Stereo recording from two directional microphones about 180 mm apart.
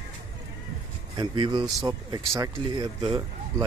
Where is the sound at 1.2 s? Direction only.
25° right (ahead or behind).